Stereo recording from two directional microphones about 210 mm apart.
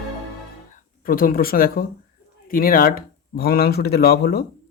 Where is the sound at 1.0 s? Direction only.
45° left (ahead or behind).